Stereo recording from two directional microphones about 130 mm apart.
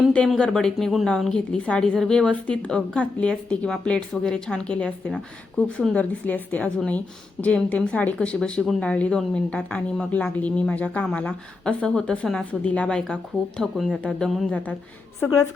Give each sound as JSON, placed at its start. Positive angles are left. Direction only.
{"t": 0.1, "sound": "a woman's voice", "side_deg": 5}
{"t": 14.0, "sound": "a woman's voice", "side_deg": 10}